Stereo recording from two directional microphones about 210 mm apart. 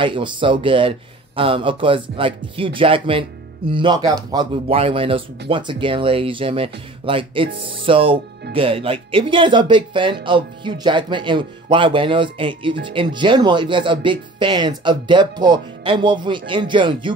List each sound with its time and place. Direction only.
0.0 s speech: 25° right (ahead or behind)